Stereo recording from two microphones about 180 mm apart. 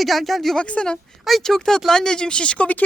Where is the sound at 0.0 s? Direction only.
Centre (ahead or behind).